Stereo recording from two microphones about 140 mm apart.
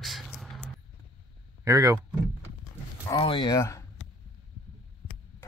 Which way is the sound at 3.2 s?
35° left (ahead or behind).